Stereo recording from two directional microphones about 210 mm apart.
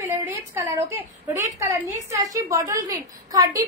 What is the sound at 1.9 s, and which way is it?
A woman's voice, 15° right (ahead or behind).